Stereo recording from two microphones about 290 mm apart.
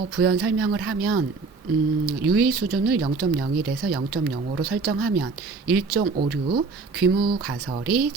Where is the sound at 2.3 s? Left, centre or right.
Right.